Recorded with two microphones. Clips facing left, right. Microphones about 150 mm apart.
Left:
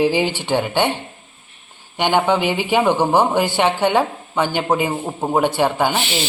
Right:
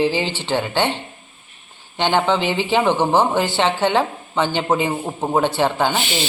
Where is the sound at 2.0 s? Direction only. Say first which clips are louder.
Left 1 dB; 10° left (ahead or behind).